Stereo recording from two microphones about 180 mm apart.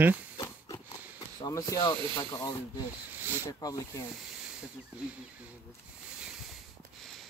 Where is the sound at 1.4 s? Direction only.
20° left (ahead or behind).